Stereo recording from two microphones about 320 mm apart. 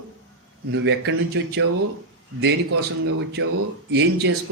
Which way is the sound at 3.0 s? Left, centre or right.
Right.